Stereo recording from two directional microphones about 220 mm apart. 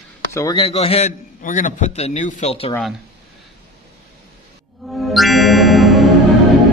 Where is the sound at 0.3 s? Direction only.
15° left (ahead or behind).